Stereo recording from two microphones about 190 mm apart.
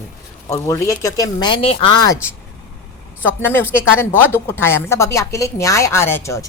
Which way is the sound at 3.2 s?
10° left (ahead or behind).